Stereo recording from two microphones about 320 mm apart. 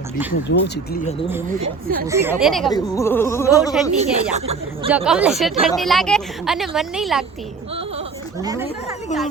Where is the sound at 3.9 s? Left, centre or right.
Centre.